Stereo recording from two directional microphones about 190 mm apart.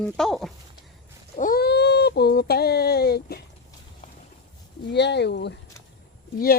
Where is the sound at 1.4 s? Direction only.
50° left (ahead or behind).